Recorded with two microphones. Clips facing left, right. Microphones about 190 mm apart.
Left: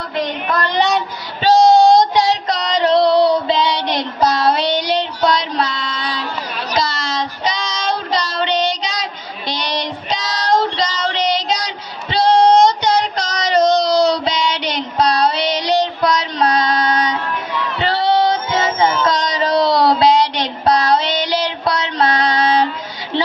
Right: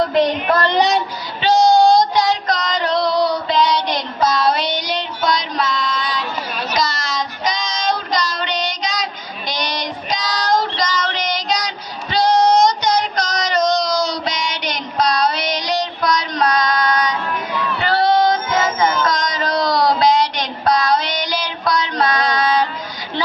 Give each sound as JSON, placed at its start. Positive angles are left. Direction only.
{"t": 1.4, "sound": "child singing", "side_deg": 30}
{"t": 6.7, "sound": "a sound", "side_deg": 30}
{"t": 7.9, "sound": "child singing", "side_deg": 30}
{"t": 17.7, "sound": "music", "side_deg": 25}